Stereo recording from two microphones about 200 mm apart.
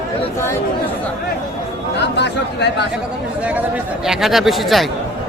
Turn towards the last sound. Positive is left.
turn(degrees=0)  # may be behind; listen again after turning